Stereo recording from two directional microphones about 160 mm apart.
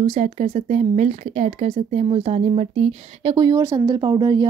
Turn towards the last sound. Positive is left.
turn(degrees=-30)  # may be behind; listen again after turning